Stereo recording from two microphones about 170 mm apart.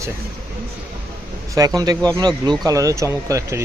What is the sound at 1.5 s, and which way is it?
Speech, 20° right (ahead or behind).